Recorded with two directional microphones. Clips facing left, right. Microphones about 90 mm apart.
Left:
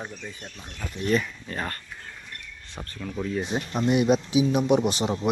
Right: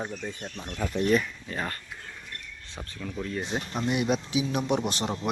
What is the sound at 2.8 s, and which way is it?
Speech, 10° left (ahead or behind).